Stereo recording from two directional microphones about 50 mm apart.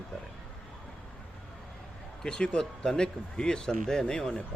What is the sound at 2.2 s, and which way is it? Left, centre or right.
Speech, centre.